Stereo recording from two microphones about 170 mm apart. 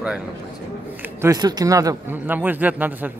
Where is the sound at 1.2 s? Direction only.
20° right (ahead or behind).